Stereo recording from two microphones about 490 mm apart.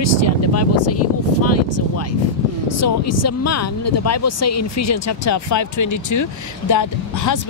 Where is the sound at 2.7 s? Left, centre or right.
Left.